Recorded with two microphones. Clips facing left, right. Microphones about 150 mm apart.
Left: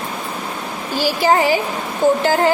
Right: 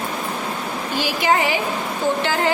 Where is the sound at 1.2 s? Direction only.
35° left (ahead or behind).